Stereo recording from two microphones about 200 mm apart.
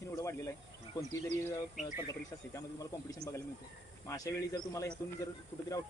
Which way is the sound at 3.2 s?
50° right (ahead or behind).